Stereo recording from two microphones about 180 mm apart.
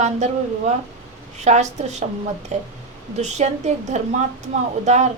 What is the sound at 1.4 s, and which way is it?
Speech, 40° right (ahead or behind).